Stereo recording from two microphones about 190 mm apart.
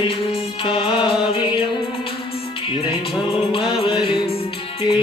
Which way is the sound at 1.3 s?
30° left (ahead or behind).